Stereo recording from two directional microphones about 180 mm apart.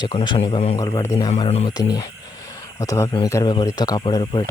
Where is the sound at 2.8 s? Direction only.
15° left (ahead or behind).